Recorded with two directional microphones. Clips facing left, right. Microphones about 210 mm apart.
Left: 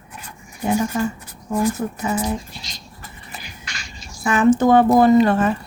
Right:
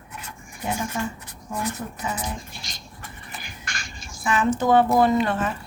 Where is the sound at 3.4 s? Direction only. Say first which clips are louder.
Even; 50° right (ahead or behind).